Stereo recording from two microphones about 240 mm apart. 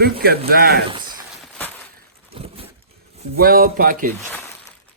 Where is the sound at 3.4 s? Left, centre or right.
Right.